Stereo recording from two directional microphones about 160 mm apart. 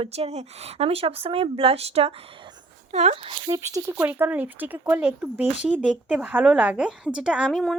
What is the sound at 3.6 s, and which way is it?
Speech, 20° right (ahead or behind).